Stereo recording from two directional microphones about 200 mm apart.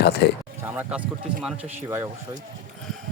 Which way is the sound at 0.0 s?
55° left (ahead or behind).